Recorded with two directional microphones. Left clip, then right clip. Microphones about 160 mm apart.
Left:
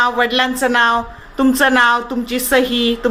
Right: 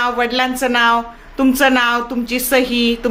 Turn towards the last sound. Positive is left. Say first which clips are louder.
# left 1 dB
turn(degrees=-5)  # may be behind; listen again after turning